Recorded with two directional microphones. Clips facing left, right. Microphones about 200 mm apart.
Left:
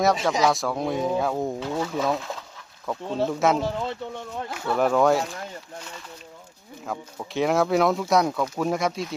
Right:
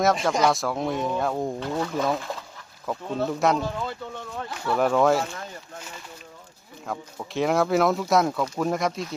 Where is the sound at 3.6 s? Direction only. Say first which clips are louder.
Left 2 dB; 25° left (ahead or behind).